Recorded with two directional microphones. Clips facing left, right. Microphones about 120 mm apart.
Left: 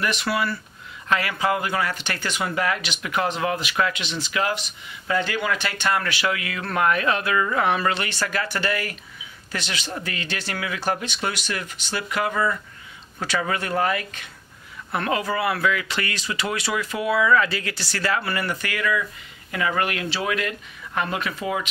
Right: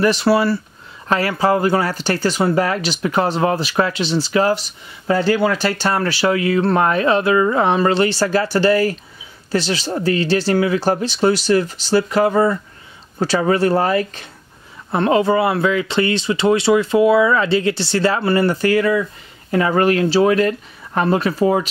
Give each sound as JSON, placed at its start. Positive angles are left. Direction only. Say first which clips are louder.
{"t": 0.0, "sound": "speech", "louder": "right 10 dB", "side_deg": -35}